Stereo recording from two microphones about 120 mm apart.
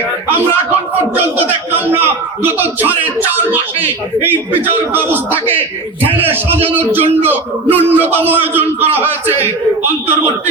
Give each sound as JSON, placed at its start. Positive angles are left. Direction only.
{"t": 1.4, "sound": "a man's voice", "side_deg": -15}